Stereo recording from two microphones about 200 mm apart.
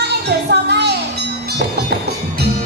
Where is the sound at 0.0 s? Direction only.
55° right (ahead or behind).